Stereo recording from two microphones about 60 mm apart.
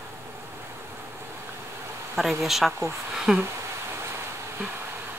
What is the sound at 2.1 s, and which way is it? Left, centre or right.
Speech, centre.